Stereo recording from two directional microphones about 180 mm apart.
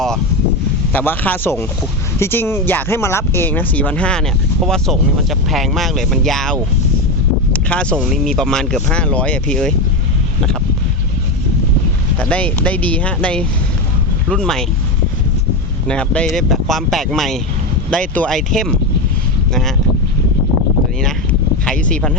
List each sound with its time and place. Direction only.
0.9 s speech: 10° left (ahead or behind)
7.5 s a sound: 5° left (ahead or behind)
7.9 s speech: centre (ahead or behind)
12.2 s speech: 5° left (ahead or behind)
15.9 s speech: 5° left (ahead or behind)
21.7 s a sound: 5° left (ahead or behind)